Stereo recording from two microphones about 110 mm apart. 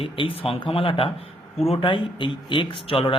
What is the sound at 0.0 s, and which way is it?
Speech, 55° left (ahead or behind).